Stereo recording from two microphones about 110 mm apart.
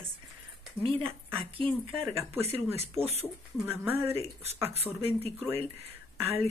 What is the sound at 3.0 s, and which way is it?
Speech, 70° right (ahead or behind).